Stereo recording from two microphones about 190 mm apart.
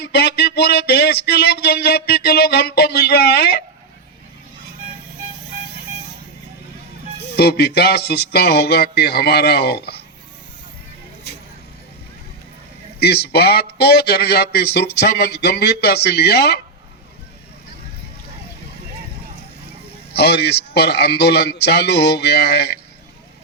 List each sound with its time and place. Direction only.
0.0 s a sound: 60° left (ahead or behind)
7.2 s speech: 60° left (ahead or behind)
13.0 s speech: 60° left (ahead or behind)
20.1 s speech: 60° left (ahead or behind)